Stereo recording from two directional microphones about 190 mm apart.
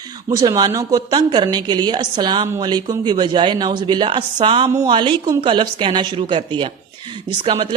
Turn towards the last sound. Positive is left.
turn(degrees=-30)  # may be behind; listen again after turning